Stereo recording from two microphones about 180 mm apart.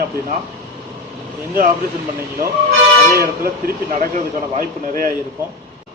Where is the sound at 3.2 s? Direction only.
50° right (ahead or behind).